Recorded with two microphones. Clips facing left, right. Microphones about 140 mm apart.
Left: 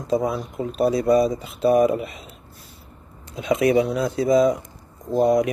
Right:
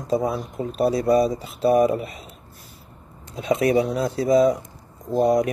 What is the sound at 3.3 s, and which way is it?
Speech, 35° right (ahead or behind).